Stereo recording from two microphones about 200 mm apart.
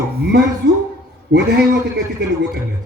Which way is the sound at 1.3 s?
60° right (ahead or behind).